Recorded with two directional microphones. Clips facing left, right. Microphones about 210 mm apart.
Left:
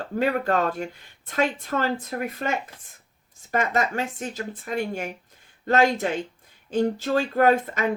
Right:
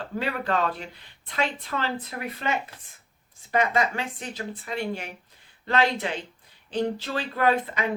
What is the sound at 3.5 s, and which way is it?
Speech, 45° left (ahead or behind).